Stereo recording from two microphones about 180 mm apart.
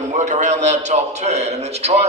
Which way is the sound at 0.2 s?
40° right (ahead or behind).